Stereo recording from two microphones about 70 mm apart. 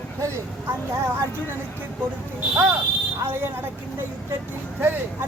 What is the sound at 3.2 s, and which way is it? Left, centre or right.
Speech, right.